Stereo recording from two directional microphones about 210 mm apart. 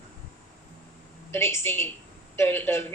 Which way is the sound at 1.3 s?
10° left (ahead or behind).